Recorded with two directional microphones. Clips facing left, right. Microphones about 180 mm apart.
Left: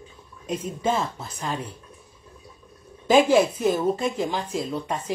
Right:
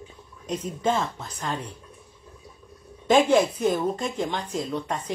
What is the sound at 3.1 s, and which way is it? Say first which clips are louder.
Speech: left 1 dB; 10° left (ahead or behind).